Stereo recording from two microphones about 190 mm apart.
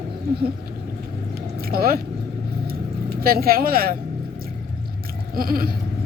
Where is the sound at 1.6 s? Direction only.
50° right (ahead or behind).